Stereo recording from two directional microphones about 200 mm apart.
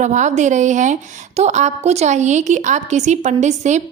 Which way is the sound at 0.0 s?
35° right (ahead or behind).